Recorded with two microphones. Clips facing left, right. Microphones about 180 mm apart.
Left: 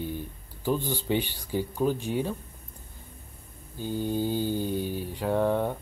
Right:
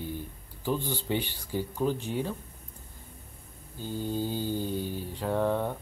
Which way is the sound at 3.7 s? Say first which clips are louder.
Left 3 dB; 15° left (ahead or behind).